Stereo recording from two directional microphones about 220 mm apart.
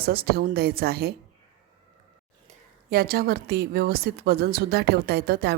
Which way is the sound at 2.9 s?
45° right (ahead or behind).